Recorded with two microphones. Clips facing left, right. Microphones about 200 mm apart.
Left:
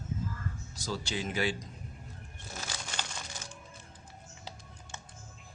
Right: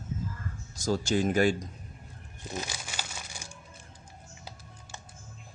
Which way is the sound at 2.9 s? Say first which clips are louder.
Even; 10° right (ahead or behind).